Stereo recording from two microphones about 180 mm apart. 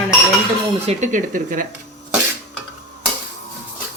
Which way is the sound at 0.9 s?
45° right (ahead or behind).